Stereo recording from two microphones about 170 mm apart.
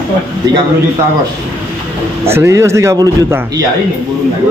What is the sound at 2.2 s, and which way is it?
Speech, 15° right (ahead or behind).